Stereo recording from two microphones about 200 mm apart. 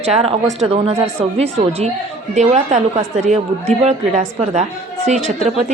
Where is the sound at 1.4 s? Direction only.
30° right (ahead or behind).